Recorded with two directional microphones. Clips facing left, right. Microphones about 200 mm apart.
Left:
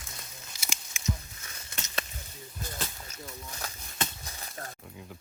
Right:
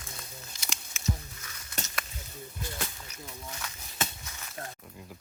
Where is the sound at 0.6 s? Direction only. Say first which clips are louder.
Left 3 dB; 10° left (ahead or behind).